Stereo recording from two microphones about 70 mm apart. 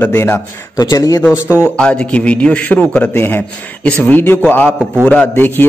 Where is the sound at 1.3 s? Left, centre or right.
Right.